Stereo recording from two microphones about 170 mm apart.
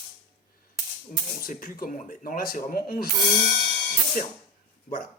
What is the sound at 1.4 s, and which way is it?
Speech, 55° left (ahead or behind).